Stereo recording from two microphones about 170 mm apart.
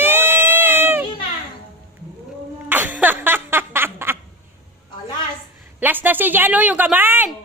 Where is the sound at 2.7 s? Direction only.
10° right (ahead or behind).